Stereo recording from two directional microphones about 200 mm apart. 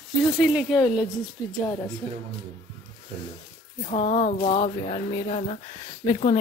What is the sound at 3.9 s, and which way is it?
Speech, 35° left (ahead or behind).